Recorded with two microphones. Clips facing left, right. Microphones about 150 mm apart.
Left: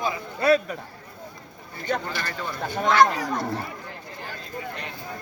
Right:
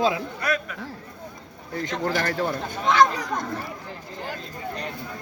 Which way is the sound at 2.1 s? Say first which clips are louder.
Right 7 dB; 55° right (ahead or behind).